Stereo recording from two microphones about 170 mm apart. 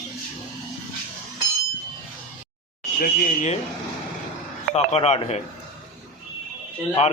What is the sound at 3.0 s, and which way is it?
Speech, 55° left (ahead or behind).